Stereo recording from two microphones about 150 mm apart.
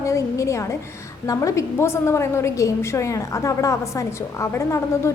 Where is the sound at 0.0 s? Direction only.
20° left (ahead or behind).